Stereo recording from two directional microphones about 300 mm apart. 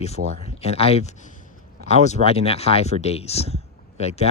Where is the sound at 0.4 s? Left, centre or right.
Centre.